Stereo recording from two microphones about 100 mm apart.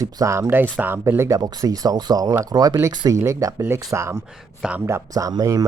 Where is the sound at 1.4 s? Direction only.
40° right (ahead or behind).